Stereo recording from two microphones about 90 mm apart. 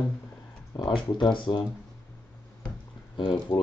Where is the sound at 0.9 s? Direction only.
65° left (ahead or behind).